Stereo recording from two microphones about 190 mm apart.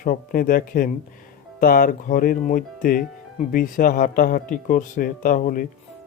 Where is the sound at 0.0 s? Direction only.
50° left (ahead or behind).